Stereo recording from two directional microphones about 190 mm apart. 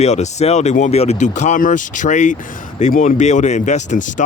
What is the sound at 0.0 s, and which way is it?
Speech, 35° left (ahead or behind).